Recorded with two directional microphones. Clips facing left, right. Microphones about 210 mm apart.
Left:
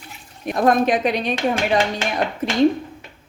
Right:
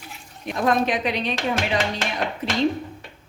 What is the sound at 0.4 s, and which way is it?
A woman's voice, 50° left (ahead or behind).